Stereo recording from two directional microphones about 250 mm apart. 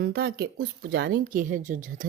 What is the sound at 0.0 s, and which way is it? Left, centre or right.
Speech, right.